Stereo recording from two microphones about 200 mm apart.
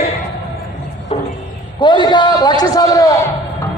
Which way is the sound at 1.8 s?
20° left (ahead or behind).